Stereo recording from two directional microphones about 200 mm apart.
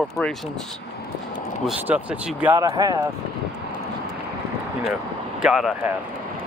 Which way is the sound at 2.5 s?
20° right (ahead or behind).